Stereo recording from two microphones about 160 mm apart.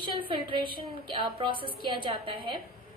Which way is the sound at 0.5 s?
30° right (ahead or behind).